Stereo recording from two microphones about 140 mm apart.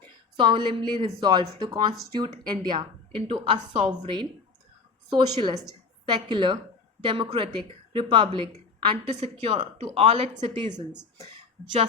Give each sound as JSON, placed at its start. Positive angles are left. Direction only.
{"t": 0.3, "sound": "a woman's voice", "side_deg": -35}